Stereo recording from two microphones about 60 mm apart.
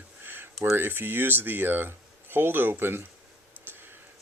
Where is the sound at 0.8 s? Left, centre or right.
Right.